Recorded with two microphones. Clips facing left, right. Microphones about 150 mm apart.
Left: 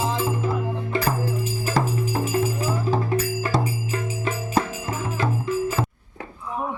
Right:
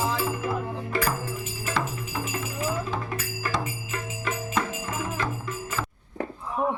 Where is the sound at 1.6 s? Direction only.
40° left (ahead or behind).